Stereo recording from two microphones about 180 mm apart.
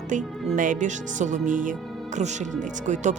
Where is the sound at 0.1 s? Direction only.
45° right (ahead or behind).